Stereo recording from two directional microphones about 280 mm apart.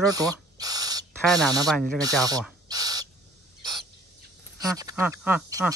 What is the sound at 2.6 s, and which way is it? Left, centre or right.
Owl, centre.